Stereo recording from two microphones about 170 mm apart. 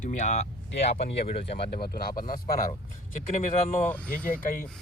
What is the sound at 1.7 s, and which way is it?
Speech, 65° left (ahead or behind).